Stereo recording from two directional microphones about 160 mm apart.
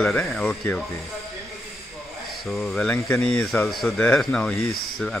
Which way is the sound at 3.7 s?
Centre (ahead or behind).